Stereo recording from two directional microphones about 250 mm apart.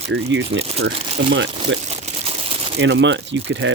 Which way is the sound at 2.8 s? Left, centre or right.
Right.